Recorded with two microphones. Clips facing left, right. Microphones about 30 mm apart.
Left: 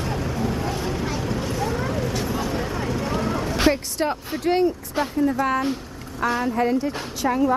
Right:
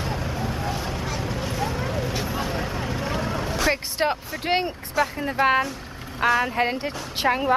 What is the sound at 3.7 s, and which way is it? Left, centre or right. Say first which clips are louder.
Speech: even; right.